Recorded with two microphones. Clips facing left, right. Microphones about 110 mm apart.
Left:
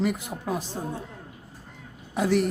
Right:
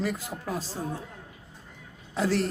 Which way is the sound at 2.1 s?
15° left (ahead or behind).